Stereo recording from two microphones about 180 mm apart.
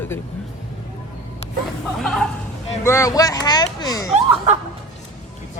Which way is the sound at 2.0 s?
5° left (ahead or behind).